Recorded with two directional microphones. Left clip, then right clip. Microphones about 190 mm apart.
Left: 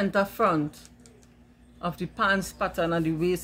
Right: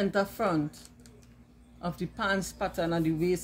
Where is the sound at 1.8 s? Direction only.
20° left (ahead or behind).